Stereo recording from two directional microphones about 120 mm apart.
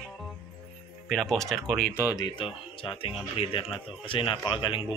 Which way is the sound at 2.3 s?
45° left (ahead or behind).